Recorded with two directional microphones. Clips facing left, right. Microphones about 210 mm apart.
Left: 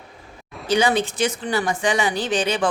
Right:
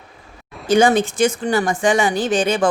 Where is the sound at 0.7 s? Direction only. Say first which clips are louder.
Right 5 dB; 50° right (ahead or behind).